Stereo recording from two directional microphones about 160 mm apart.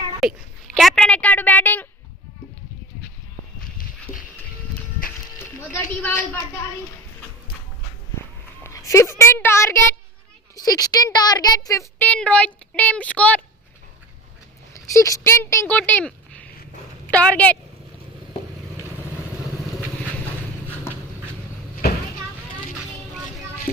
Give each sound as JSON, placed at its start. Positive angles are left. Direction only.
{"t": 0.2, "sound": "a woman's voice", "side_deg": 0}
{"t": 5.7, "sound": "a woman's voice", "side_deg": 10}
{"t": 8.6, "sound": "a woman's voice", "side_deg": 20}
{"t": 14.7, "sound": "a woman's voice", "side_deg": 20}